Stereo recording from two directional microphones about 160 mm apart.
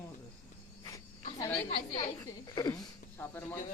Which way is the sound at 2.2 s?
20° left (ahead or behind).